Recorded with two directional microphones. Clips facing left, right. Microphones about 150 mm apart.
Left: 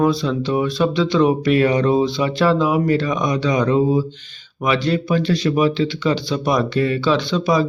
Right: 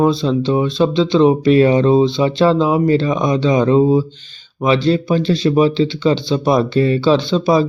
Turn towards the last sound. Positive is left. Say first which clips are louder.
# right 4 dB
turn(degrees=-30)  # may be behind; listen again after turning